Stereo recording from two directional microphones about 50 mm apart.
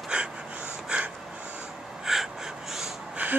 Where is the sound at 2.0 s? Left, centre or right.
Centre.